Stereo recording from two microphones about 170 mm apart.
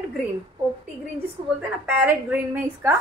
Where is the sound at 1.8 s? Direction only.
10° right (ahead or behind).